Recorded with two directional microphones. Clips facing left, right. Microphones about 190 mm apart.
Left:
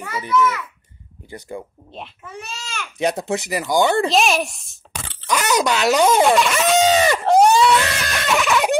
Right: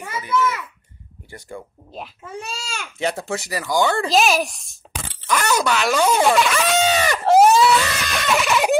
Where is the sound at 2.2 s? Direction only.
30° right (ahead or behind).